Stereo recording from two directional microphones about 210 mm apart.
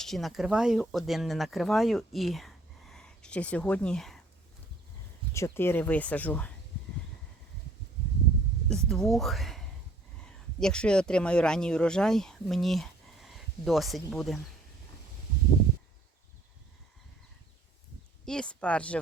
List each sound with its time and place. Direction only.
0.0 s speech: centre (ahead or behind)
5.3 s speech: 10° left (ahead or behind)
8.7 s speech: centre (ahead or behind)
18.3 s speech: 5° left (ahead or behind)